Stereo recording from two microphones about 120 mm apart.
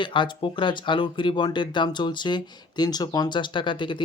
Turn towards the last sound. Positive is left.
turn(degrees=40)  # may be behind; listen again after turning